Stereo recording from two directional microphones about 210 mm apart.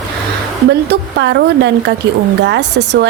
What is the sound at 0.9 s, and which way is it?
A woman's voice, 55° right (ahead or behind).